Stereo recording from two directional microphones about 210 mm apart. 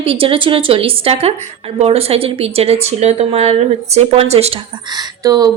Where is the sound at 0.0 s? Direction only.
25° right (ahead or behind).